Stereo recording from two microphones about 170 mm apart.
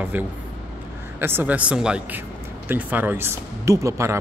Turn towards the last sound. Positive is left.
turn(degrees=-15)  # may be behind; listen again after turning